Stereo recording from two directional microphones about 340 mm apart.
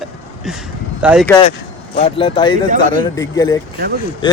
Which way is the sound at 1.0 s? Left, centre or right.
Centre.